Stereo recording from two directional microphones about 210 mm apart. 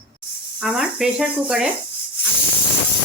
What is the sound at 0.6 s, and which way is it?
Speech, 5° right (ahead or behind).